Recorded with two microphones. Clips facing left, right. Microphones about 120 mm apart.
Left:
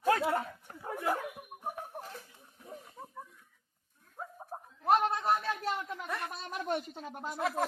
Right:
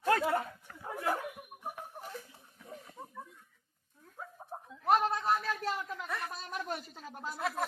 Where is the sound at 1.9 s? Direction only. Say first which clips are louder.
Left 2 dB; 60° left (ahead or behind).